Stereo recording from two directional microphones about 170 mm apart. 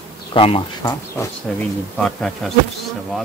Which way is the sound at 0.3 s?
30° left (ahead or behind).